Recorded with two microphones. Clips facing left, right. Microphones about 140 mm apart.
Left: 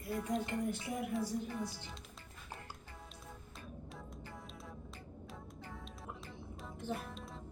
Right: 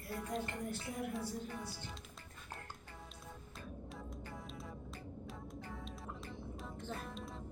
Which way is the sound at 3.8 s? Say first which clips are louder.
Right 2 dB; centre (ahead or behind).